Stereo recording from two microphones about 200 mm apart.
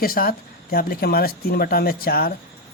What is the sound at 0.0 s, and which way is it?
Speech, 45° left (ahead or behind).